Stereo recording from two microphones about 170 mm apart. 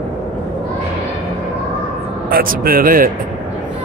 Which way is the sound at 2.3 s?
60° right (ahead or behind).